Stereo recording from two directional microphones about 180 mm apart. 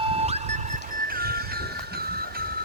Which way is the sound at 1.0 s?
55° right (ahead or behind).